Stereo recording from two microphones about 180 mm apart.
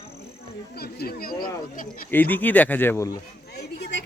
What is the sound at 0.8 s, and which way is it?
Speech, 60° left (ahead or behind).